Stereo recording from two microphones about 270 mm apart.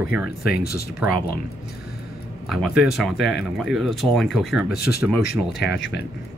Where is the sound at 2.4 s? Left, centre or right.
Centre.